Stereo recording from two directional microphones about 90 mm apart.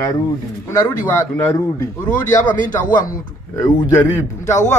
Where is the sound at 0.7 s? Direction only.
35° left (ahead or behind).